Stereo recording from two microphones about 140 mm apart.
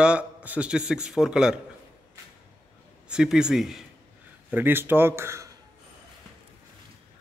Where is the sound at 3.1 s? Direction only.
5° right (ahead or behind).